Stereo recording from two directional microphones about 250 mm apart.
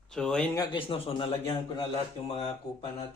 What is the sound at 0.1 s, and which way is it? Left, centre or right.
A man's voice, centre.